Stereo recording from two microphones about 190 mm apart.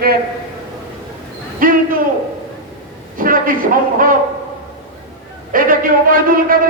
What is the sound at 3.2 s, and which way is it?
A man's voice, 50° right (ahead or behind).